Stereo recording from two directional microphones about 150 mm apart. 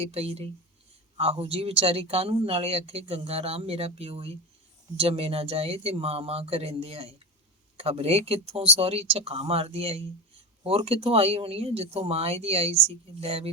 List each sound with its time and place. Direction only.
0.0 s speech: 40° right (ahead or behind)